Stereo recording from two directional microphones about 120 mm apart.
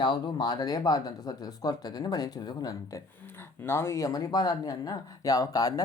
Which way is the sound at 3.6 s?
20° left (ahead or behind).